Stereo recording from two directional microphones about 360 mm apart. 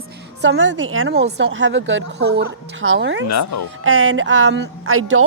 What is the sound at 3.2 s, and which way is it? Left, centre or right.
Speech, left.